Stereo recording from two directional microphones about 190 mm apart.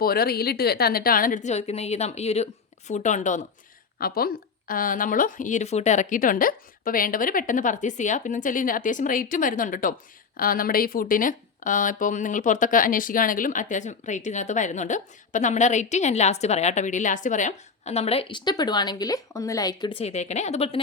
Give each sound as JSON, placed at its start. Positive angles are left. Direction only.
{"t": 0.0, "sound": "speech", "side_deg": 55}
{"t": 3.9, "sound": "speech", "side_deg": 50}